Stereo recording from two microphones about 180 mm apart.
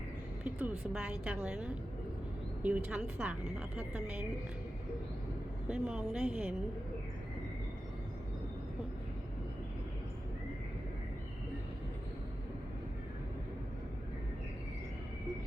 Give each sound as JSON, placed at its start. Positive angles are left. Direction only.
{"t": 0.4, "sound": "a woman's voice", "side_deg": -5}
{"t": 5.6, "sound": "a woman's voice", "side_deg": -5}